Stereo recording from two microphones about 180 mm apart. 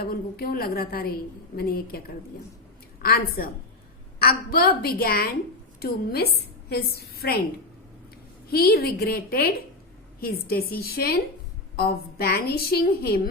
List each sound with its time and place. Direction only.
0.0 s a woman's voice: 60° left (ahead or behind)
3.0 s a woman's voice: 55° left (ahead or behind)
8.4 s a woman's voice: 55° left (ahead or behind)